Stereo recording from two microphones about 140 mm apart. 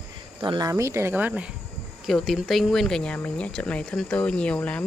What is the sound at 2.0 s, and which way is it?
Speech, centre (ahead or behind).